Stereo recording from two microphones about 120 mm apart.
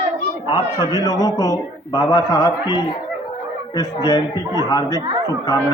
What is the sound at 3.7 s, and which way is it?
A man's voice, 30° left (ahead or behind).